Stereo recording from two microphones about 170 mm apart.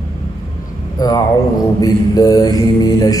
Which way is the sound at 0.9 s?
25° left (ahead or behind).